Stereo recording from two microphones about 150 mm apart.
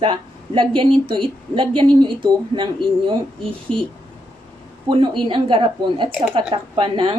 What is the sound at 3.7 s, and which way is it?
Speech, 5° left (ahead or behind).